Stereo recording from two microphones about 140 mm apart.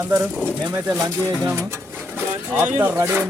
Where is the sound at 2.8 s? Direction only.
15° right (ahead or behind).